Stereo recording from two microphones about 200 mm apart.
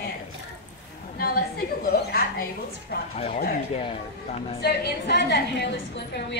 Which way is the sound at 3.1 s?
35° left (ahead or behind).